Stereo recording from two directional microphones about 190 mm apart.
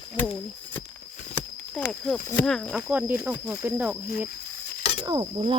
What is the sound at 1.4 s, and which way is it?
Speech, 5° left (ahead or behind).